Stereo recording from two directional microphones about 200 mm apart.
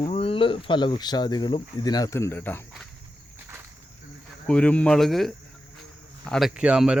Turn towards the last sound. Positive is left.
turn(degrees=-5)  # may be behind; listen again after turning